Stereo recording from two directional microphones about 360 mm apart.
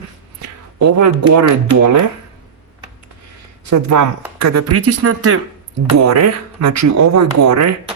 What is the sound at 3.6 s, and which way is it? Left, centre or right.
Speech, right.